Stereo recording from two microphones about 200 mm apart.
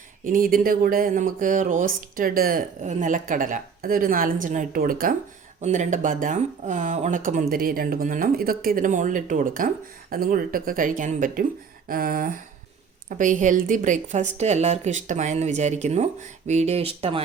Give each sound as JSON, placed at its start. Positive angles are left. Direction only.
{"t": 0.3, "sound": "speech", "side_deg": -45}